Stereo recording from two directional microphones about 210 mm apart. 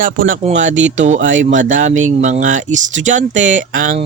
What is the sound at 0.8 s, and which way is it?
Speech, 60° right (ahead or behind).